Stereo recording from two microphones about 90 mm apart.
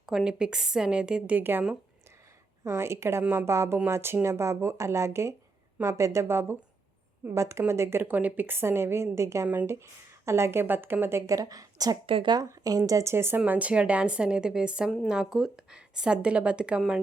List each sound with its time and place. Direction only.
0.0 s a woman's voice: 5° right (ahead or behind)
1.4 s a woman's voice: 25° right (ahead or behind)
2.6 s a woman's voice: 30° right (ahead or behind)
11.3 s a woman's voice: 40° right (ahead or behind)
12.0 s speech: 90° right
12.5 s speech: 40° right (ahead or behind)
13.4 s a woman's voice: 15° right (ahead or behind)